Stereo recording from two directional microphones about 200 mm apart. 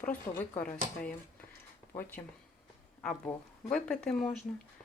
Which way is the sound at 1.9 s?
10° left (ahead or behind).